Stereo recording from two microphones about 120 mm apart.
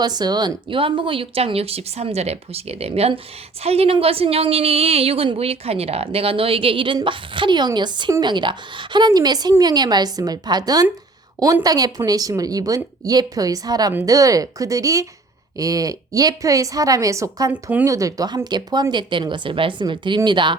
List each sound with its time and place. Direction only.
0.0 s a woman's voice: 35° right (ahead or behind)
17.5 s speech: 10° right (ahead or behind)
17.8 s speech: 30° right (ahead or behind)